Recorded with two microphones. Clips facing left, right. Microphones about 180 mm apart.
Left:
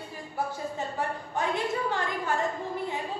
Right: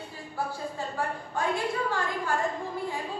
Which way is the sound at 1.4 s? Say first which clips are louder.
Even; 20° left (ahead or behind).